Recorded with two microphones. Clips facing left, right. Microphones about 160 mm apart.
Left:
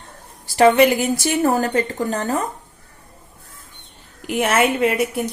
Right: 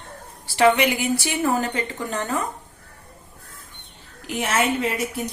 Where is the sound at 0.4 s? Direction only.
40° left (ahead or behind).